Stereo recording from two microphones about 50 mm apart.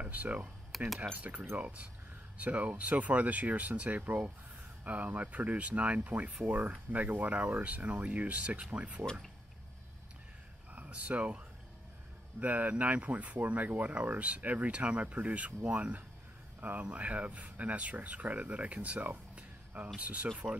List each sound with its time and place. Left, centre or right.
0.0 s speech: right
0.7 s typing: centre
1.1 s speech: right
10.7 s speech: right